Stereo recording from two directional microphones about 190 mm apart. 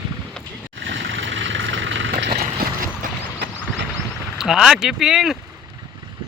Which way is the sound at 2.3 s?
45° right (ahead or behind).